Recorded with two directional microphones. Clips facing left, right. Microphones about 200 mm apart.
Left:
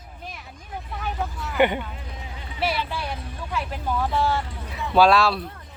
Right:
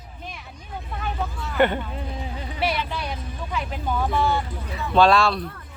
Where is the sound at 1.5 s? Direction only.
15° left (ahead or behind).